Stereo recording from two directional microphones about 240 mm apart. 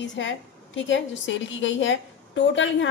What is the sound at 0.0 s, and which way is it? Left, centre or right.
A woman's voice, left.